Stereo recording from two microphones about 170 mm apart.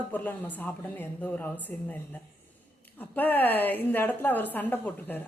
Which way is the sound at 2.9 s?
10° left (ahead or behind).